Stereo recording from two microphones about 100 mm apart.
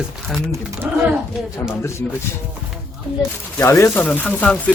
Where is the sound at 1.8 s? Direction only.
25° left (ahead or behind).